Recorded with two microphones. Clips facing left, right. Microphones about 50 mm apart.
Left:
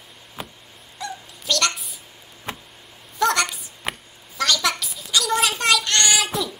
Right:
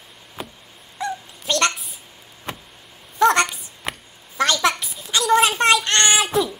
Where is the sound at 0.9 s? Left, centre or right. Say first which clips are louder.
Right 6 dB; right.